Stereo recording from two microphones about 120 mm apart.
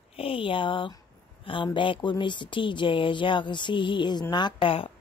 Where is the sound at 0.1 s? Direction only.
50° left (ahead or behind).